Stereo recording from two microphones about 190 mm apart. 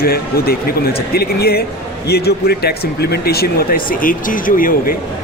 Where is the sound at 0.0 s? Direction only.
50° left (ahead or behind).